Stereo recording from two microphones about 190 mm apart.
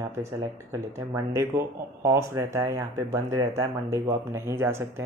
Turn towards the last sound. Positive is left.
turn(degrees=-15)  # may be behind; listen again after turning